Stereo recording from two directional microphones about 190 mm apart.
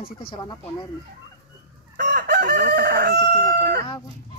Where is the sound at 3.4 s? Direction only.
10° left (ahead or behind).